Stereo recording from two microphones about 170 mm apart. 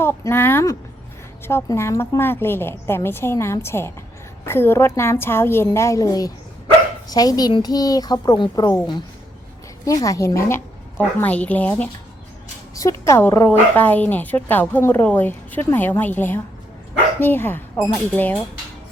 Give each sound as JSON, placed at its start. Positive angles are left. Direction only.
{"t": 0.0, "sound": "speech", "side_deg": 15}
{"t": 12.7, "sound": "speech", "side_deg": 20}